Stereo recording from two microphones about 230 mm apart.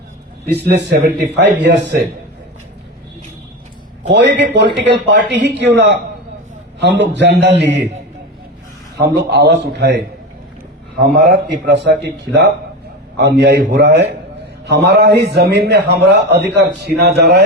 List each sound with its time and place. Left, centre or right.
0.4 s a man's voice: right
4.1 s a man's voice: right
9.0 s a man's voice: right
11.3 s a man's voice: right